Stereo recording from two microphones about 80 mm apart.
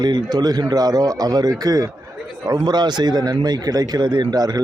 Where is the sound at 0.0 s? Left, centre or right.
Right.